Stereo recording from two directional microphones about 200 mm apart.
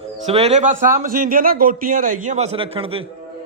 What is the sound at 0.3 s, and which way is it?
A man's voice, 30° right (ahead or behind).